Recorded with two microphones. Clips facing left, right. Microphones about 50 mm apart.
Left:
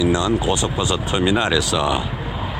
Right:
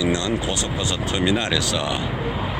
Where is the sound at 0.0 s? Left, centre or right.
Centre.